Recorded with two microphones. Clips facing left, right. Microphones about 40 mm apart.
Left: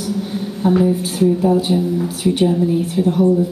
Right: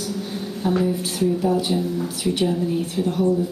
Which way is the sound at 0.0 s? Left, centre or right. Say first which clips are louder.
Left 6 dB; left.